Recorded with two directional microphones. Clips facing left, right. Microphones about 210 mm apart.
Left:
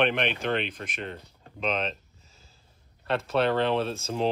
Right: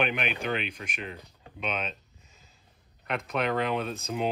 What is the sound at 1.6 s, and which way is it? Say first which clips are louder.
Speech: left 4 dB; 35° left (ahead or behind).